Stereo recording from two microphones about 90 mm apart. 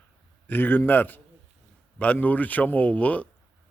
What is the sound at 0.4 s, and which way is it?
A man's voice, 20° left (ahead or behind).